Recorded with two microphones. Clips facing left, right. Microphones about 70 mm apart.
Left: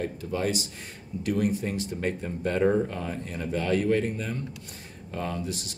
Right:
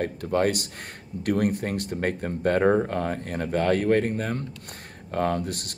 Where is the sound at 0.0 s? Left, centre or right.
Right.